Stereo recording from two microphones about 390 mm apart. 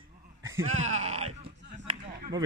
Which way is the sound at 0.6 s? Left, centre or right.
Right.